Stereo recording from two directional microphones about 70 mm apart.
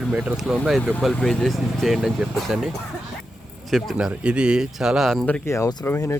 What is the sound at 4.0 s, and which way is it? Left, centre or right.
Speech, centre.